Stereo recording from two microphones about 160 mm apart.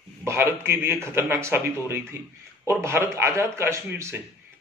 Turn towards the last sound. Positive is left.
turn(degrees=-15)  # may be behind; listen again after turning